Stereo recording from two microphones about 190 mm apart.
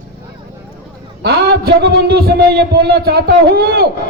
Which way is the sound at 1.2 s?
55° right (ahead or behind).